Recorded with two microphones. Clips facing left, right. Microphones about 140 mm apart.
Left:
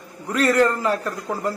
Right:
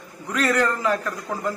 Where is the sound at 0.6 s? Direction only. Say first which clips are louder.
Left 3 dB; 35° left (ahead or behind).